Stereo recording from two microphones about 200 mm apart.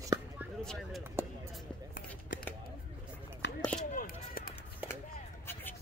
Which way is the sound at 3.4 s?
65° left (ahead or behind).